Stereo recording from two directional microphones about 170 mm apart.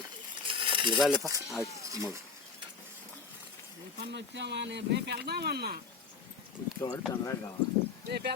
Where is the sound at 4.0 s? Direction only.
90° right; by 5.8 s 70° right (ahead or behind).